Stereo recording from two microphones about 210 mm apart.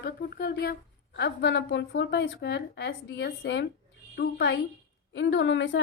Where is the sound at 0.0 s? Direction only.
45° left (ahead or behind).